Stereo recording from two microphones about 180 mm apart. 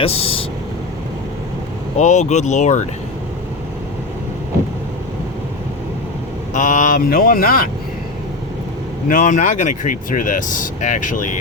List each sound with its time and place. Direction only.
0.0 s speech: 35° left (ahead or behind)
2.0 s speech: 40° left (ahead or behind)
6.5 s speech: 45° left (ahead or behind)
9.0 s speech: 45° left (ahead or behind)